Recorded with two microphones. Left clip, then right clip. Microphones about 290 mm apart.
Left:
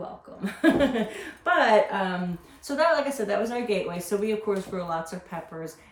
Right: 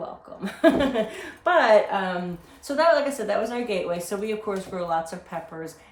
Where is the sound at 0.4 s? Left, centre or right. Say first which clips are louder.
Right 2 dB; centre.